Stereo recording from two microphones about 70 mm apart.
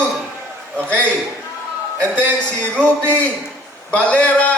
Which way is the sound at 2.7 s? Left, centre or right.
Centre.